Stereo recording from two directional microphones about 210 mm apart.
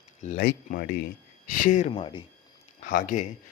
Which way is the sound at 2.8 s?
40° left (ahead or behind).